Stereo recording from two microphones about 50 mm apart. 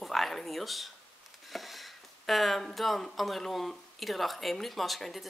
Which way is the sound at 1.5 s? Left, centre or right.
Centre.